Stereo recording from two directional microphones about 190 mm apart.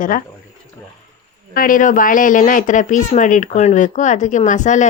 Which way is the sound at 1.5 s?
45° left (ahead or behind).